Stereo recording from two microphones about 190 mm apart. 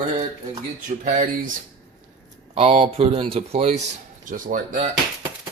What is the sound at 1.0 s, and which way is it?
Speech, 40° right (ahead or behind).